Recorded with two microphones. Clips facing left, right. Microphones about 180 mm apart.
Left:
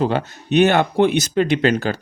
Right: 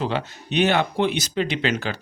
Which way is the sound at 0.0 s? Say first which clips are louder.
Left 6 dB; 45° left (ahead or behind).